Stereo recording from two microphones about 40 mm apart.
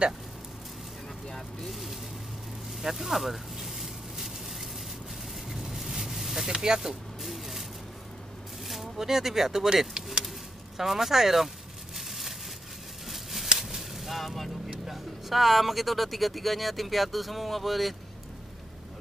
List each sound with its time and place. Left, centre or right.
1.2 s speech: centre
2.8 s a sound: centre
6.5 s speech: centre
8.6 s speech: centre
10.8 s a sound: centre
13.6 s whip: centre
14.9 s speech: centre